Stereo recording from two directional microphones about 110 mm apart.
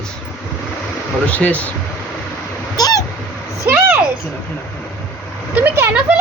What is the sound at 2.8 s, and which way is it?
Cat, 35° left (ahead or behind).